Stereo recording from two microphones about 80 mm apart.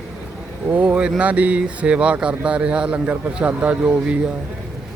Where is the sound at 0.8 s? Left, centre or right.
Centre.